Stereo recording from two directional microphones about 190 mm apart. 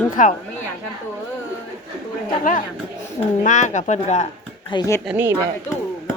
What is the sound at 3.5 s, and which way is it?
Speech, 40° left (ahead or behind).